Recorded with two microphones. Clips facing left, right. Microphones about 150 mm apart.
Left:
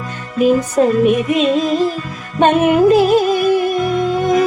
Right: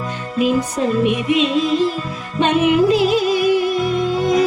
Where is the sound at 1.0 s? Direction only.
45° left (ahead or behind).